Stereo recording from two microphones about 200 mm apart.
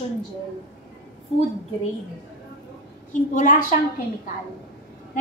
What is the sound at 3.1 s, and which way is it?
Speech, 40° left (ahead or behind).